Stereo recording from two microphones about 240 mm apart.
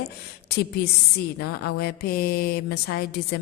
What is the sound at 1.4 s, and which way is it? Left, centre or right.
Mantra, left.